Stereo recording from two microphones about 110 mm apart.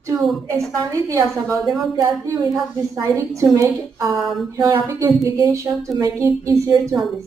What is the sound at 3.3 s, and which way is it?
Speech, 30° right (ahead or behind).